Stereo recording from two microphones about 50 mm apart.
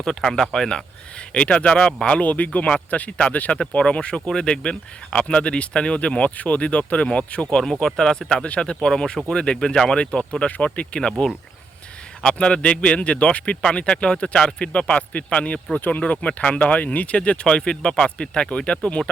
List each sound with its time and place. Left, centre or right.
0.0 s speech: centre
1.3 s speech: left
3.1 s speech: centre
7.5 s speech: centre; by 11.1 s left
12.3 s speech: left
17.2 s speech: centre